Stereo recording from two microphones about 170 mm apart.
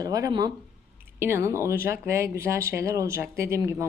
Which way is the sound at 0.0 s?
20° right (ahead or behind).